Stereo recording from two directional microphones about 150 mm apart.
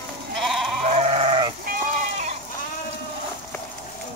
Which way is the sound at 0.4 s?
Centre (ahead or behind).